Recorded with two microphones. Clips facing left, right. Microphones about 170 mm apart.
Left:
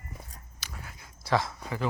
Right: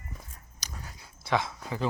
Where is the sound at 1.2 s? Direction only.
20° right (ahead or behind).